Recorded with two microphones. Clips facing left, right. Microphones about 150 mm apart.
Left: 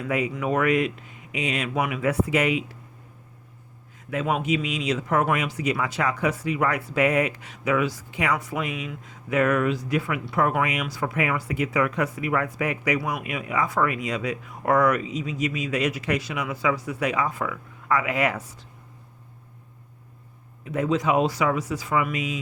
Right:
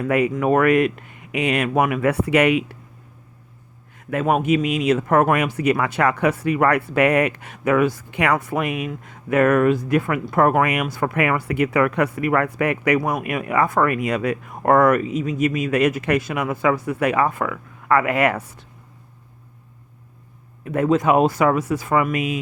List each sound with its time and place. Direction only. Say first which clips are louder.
0.0 s speech: right 7 dB; 60° right (ahead or behind)
4.1 s speech: right 6 dB; 55° right (ahead or behind)
20.7 s speech: right 6 dB; 55° right (ahead or behind)